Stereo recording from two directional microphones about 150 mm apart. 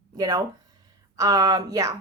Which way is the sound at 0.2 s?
25° right (ahead or behind).